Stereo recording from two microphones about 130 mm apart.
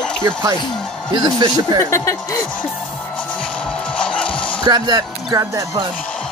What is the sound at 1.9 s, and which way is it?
Speech, 20° left (ahead or behind).